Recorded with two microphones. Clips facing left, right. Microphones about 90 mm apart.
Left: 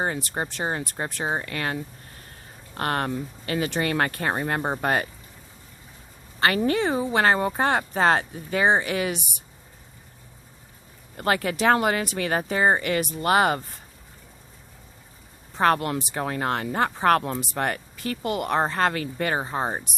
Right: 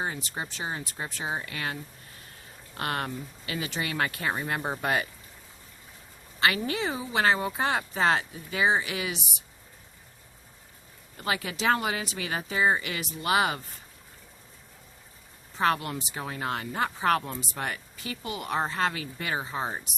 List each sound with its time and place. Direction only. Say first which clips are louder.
0.0 s speech: left 6 dB; 55° left (ahead or behind); by 5.0 s 40° left (ahead or behind)
6.4 s speech: left 5 dB; 45° left (ahead or behind)
11.2 s speech: left 7 dB; 50° left (ahead or behind)
15.5 s speech: left 5 dB; 50° left (ahead or behind)
15.9 s speech: left 7 dB; 60° left (ahead or behind); by 19.9 s 45° left (ahead or behind)